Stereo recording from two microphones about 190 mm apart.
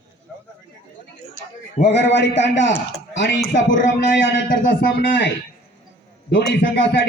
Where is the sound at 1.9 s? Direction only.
65° left (ahead or behind).